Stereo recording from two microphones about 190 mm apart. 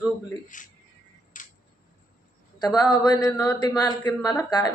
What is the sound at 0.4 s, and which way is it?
Speech, 45° left (ahead or behind).